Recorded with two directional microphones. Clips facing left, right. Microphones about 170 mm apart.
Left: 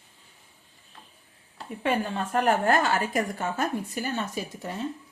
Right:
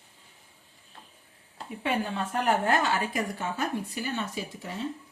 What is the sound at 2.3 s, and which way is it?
A woman's voice, 45° left (ahead or behind).